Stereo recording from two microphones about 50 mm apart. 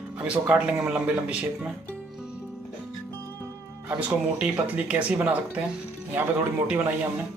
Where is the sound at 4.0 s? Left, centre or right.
Right.